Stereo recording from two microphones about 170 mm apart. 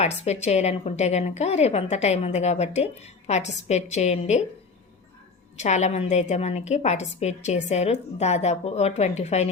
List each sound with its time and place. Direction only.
0.0 s a woman's voice: 40° left (ahead or behind)
5.5 s a woman's voice: 40° left (ahead or behind)